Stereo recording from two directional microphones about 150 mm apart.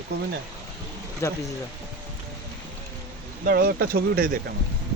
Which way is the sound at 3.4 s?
90° right.